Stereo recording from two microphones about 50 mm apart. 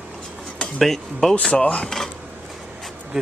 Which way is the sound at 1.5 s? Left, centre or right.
Left.